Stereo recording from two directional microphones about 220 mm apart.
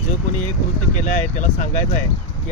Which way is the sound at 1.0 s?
35° left (ahead or behind).